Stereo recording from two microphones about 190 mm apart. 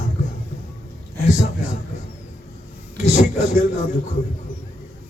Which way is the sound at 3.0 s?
40° left (ahead or behind).